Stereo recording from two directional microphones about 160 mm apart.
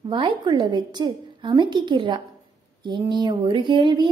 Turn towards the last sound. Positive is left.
turn(degrees=-30)  # may be behind; listen again after turning